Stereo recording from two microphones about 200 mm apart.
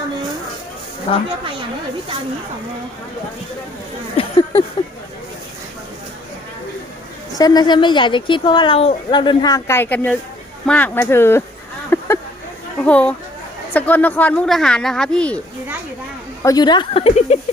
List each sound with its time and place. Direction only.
1.1 s a woman's voice: 30° left (ahead or behind)
4.2 s a sound: 25° left (ahead or behind)
7.3 s a woman's voice: 20° left (ahead or behind)
11.9 s a sound: 10° left (ahead or behind)
12.8 s speech: 5° left (ahead or behind)
16.4 s a woman's voice: 20° left (ahead or behind)